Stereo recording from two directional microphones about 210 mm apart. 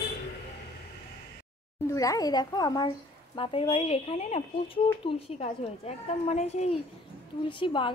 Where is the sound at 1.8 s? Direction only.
15° left (ahead or behind).